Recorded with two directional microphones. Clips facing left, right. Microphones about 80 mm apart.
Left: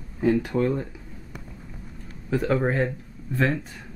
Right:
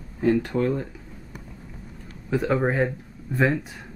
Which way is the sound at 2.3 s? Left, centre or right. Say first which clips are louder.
Even; centre.